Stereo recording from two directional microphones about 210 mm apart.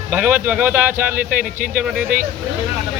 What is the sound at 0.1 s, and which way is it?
Speech, 10° right (ahead or behind).